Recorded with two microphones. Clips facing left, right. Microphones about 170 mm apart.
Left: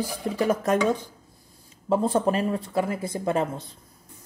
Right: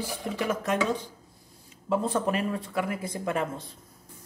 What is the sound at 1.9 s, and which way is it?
Speech, 35° left (ahead or behind).